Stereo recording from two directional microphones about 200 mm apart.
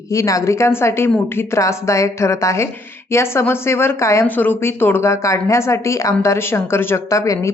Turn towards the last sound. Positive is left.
turn(degrees=15)  # may be behind; listen again after turning